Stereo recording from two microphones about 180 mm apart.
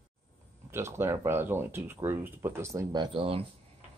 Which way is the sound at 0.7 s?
15° right (ahead or behind).